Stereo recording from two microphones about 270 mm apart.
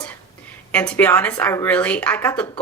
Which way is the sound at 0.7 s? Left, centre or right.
Centre.